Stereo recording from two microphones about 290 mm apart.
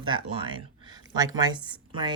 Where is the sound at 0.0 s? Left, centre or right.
Centre.